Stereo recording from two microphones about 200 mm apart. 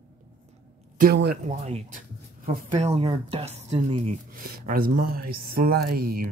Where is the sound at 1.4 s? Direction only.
30° right (ahead or behind).